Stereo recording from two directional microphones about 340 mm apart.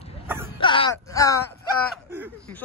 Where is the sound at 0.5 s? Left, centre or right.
Centre.